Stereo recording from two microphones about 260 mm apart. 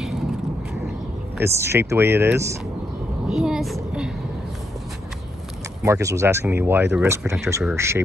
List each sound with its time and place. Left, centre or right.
1.4 s speech: centre
3.3 s a sound: centre
5.8 s speech: centre